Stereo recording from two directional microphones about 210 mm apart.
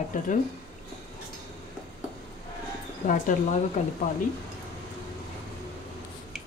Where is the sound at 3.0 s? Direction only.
40° left (ahead or behind).